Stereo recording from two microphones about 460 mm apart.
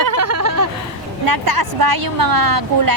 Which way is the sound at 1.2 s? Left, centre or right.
Right.